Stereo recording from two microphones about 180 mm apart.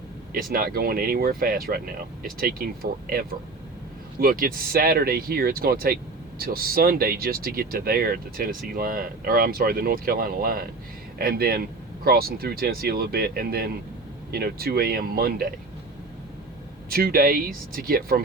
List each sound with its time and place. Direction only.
0.5 s speech: 55° right (ahead or behind)
16.9 s speech: 55° right (ahead or behind)